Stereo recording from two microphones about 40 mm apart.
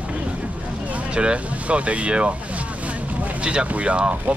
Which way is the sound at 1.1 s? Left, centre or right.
Right.